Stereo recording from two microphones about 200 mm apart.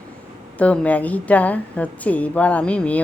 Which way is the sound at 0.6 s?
5° left (ahead or behind).